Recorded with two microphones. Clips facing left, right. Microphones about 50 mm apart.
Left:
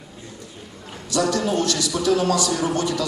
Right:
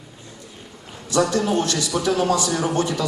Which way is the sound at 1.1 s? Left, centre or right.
Right.